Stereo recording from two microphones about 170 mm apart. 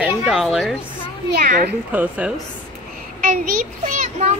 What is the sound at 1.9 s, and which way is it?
Speech, 10° right (ahead or behind).